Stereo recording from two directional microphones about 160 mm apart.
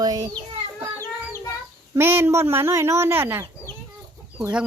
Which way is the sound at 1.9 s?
15° right (ahead or behind).